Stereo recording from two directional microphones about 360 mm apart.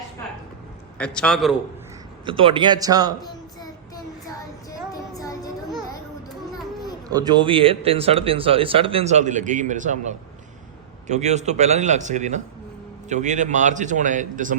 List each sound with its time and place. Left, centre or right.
0.9 s a man's voice: centre
2.2 s speech: centre
3.2 s child singing: centre
7.1 s a man's voice: centre